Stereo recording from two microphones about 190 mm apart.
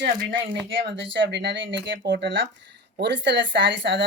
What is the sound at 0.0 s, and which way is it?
Speech, 65° right (ahead or behind).